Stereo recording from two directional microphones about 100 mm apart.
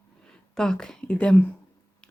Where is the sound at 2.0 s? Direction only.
10° left (ahead or behind).